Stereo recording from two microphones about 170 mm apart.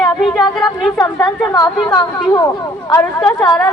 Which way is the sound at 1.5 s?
20° left (ahead or behind).